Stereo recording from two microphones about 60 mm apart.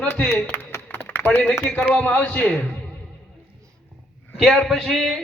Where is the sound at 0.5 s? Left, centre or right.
Left.